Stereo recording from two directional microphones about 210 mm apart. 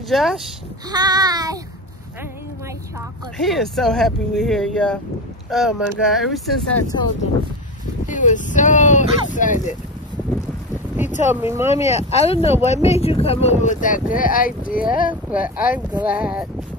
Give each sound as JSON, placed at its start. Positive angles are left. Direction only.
{"t": 0.1, "sound": "speech", "side_deg": 0}
{"t": 0.8, "sound": "child singing", "side_deg": -20}
{"t": 3.3, "sound": "speech", "side_deg": 0}
{"t": 8.1, "sound": "speech", "side_deg": 35}
{"t": 11.2, "sound": "child singing", "side_deg": -10}
{"t": 11.7, "sound": "speech", "side_deg": 30}
{"t": 15.4, "sound": "child singing", "side_deg": -5}
{"t": 16.0, "sound": "speech", "side_deg": -5}